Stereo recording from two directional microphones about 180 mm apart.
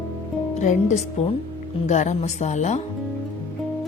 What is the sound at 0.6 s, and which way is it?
Speech, 40° left (ahead or behind).